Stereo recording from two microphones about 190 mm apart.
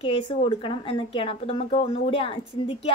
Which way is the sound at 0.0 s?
30° left (ahead or behind).